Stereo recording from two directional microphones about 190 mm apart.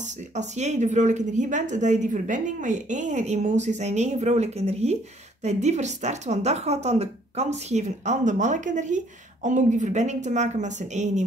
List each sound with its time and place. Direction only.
0.3 s a woman's voice: 35° right (ahead or behind)